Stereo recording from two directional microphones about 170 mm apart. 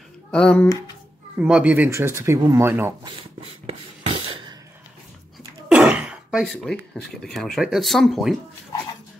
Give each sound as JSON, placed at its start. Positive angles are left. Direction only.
{"t": 0.3, "sound": "speech", "side_deg": 5}
{"t": 1.4, "sound": "speech", "side_deg": -10}
{"t": 3.0, "sound": "a sound", "side_deg": -30}
{"t": 5.7, "sound": "speech", "side_deg": -5}